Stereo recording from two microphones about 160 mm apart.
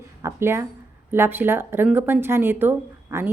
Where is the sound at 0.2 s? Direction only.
15° right (ahead or behind).